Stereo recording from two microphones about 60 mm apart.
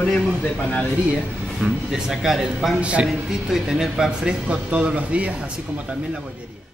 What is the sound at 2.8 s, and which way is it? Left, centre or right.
Speech, centre.